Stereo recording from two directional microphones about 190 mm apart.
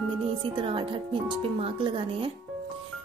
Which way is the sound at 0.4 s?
30° right (ahead or behind).